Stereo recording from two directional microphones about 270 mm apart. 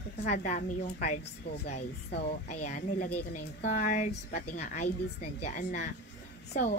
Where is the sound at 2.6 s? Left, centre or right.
Left.